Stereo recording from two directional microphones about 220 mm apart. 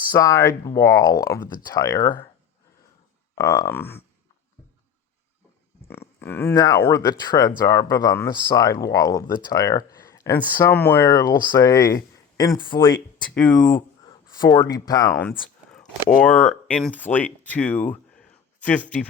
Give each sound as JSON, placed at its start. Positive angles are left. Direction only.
{"t": 0.2, "sound": "speech", "side_deg": 15}
{"t": 3.3, "sound": "speech", "side_deg": 15}
{"t": 5.9, "sound": "speech", "side_deg": 10}
{"t": 13.3, "sound": "speech", "side_deg": 5}
{"t": 14.1, "sound": "speech", "side_deg": 20}